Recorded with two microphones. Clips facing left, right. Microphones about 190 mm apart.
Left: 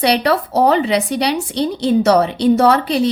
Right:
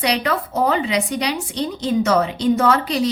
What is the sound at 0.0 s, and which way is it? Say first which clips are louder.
Speech: left 5 dB; 35° left (ahead or behind).